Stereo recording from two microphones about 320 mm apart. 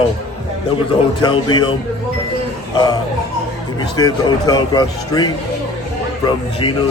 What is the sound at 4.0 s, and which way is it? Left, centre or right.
A man's voice, centre.